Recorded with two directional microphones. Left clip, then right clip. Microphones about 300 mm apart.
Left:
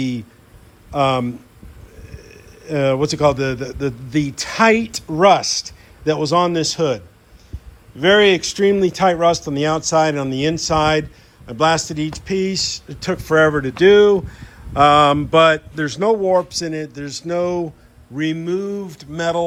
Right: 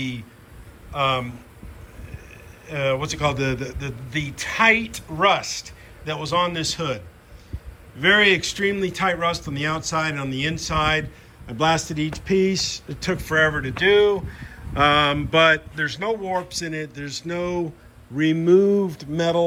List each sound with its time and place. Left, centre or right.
0.9 s speech: centre
2.6 s speech: centre
18.2 s a sound: centre